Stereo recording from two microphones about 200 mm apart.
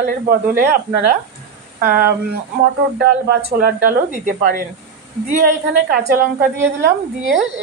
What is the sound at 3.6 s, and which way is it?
Speech, 45° right (ahead or behind).